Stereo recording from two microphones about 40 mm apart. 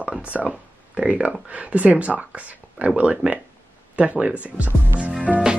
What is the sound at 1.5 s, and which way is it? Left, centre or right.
Speech, right.